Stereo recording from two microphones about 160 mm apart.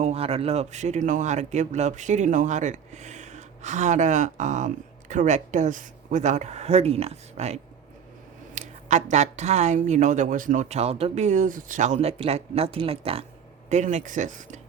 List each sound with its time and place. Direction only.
0.0 s speech: 40° right (ahead or behind)
13.7 s speech: 50° right (ahead or behind)